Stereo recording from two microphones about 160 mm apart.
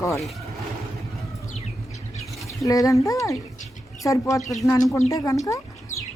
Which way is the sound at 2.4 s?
20° left (ahead or behind).